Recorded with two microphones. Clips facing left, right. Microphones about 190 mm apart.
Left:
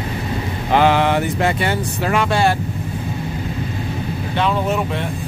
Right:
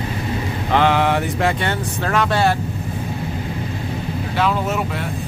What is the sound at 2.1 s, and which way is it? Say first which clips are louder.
Speech: left 1 dB; 5° left (ahead or behind).